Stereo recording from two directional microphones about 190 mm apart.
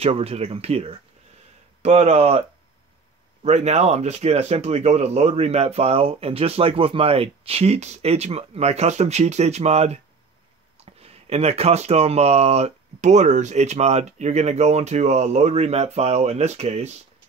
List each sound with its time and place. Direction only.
0.0 s speech: 30° right (ahead or behind)
3.4 s speech: 35° right (ahead or behind)